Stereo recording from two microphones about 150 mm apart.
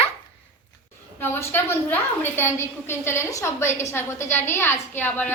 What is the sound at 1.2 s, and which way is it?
A woman's voice, 15° left (ahead or behind).